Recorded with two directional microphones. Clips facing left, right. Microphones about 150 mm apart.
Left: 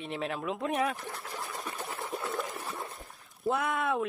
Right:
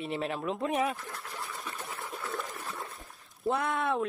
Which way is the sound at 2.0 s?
20° left (ahead or behind).